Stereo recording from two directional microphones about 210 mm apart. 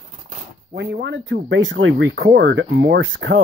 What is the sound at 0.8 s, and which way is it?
Speech, 50° right (ahead or behind).